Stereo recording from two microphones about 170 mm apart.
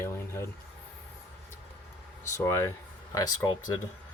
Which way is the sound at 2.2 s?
15° left (ahead or behind).